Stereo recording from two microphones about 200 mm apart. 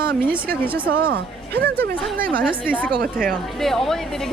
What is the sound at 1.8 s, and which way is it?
Speech, 45° right (ahead or behind).